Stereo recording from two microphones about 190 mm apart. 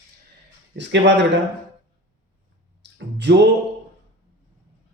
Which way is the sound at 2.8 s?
65° right (ahead or behind).